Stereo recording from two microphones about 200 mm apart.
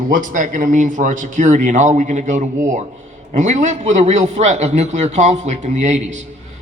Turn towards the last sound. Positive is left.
turn(degrees=-35)  # may be behind; listen again after turning